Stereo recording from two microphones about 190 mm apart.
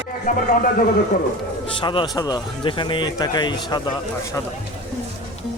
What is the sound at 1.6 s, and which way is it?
Speech, 25° left (ahead or behind).